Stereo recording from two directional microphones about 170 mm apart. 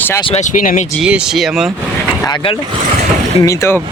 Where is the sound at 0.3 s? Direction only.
45° left (ahead or behind).